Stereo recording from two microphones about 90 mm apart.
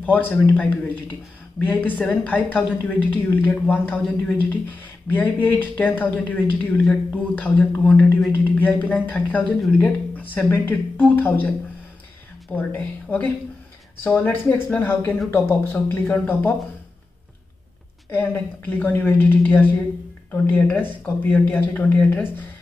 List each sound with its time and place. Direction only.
0.0 s a woman's voice: 20° left (ahead or behind)
1.7 s a woman's voice: 20° left (ahead or behind)
12.5 s a woman's voice: 20° left (ahead or behind)
18.1 s a woman's voice: 20° left (ahead or behind)